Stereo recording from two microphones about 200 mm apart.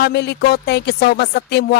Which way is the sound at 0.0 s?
55° left (ahead or behind).